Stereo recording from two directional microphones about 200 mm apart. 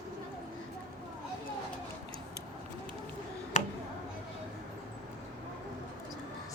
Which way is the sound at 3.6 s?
40° left (ahead or behind).